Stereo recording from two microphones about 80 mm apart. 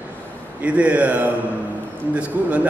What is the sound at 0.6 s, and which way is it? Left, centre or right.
A man's voice, centre.